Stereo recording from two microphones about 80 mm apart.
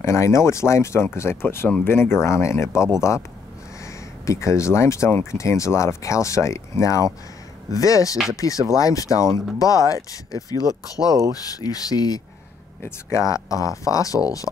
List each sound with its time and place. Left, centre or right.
0.0 s speech: left
12.8 s speech: left